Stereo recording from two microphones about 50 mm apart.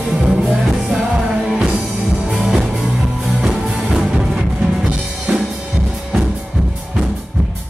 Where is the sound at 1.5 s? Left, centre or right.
Centre.